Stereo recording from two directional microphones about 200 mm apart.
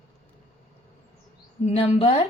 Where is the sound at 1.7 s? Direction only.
30° left (ahead or behind).